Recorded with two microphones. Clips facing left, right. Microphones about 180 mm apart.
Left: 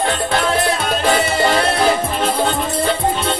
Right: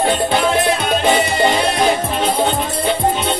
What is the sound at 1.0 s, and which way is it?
Music, 25° right (ahead or behind).